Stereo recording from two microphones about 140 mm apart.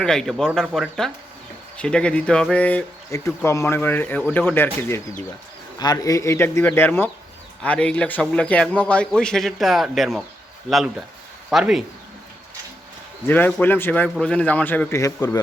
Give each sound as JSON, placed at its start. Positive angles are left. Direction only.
{"t": 0.0, "sound": "a man's voice", "side_deg": 5}
{"t": 5.8, "sound": "a man's voice", "side_deg": 25}
{"t": 13.2, "sound": "a man's voice", "side_deg": 15}